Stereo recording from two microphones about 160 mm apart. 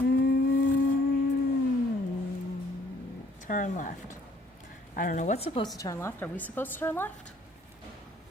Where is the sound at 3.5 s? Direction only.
55° left (ahead or behind); by 5.7 s 35° left (ahead or behind).